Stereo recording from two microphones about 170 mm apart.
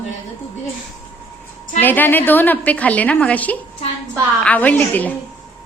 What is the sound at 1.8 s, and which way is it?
A woman's voice, 10° left (ahead or behind).